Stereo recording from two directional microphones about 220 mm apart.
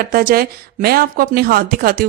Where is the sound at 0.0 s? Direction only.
40° right (ahead or behind).